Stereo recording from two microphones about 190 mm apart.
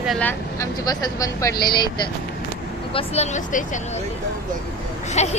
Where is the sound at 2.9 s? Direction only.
35° left (ahead or behind).